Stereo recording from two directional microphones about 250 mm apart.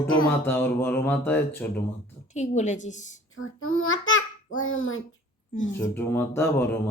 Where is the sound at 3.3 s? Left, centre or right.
Left.